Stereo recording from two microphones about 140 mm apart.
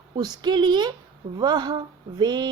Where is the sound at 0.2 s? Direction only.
30° right (ahead or behind).